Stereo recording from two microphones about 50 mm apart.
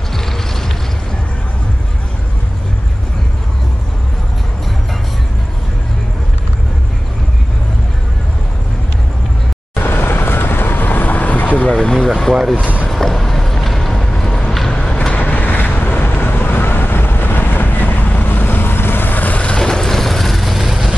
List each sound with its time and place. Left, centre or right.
9.8 s vehicle: left
11.7 s vehicle: centre
12.5 s speech: left
12.9 s vehicle: centre
14.7 s vehicle: centre
15.1 s vehicle: left
19.6 s vehicle: centre